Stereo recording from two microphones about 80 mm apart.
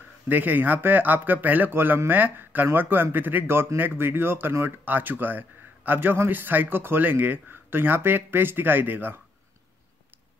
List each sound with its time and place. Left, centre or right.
0.3 s speech: right